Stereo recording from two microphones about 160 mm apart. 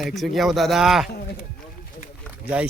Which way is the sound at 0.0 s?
Centre (ahead or behind).